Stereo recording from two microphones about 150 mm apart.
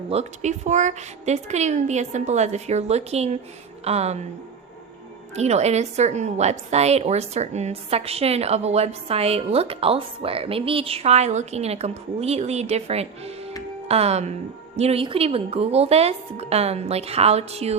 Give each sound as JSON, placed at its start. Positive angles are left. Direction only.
{"t": 0.1, "sound": "a woman's voice", "side_deg": -50}
{"t": 5.3, "sound": "a woman's voice", "side_deg": -45}